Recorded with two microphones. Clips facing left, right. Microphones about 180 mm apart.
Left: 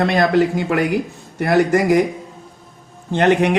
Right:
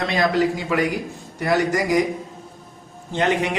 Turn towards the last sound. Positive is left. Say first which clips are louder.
# left 6 dB
turn(degrees=60)  # may be behind; listen again after turning